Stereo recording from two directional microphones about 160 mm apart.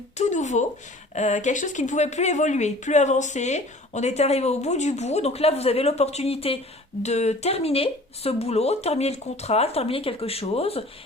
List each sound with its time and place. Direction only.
0.2 s a woman's voice: 45° left (ahead or behind)